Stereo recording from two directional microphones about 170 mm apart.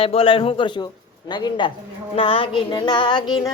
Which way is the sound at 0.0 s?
35° left (ahead or behind).